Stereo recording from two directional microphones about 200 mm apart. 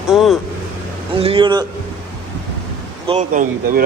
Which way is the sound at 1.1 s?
25° right (ahead or behind).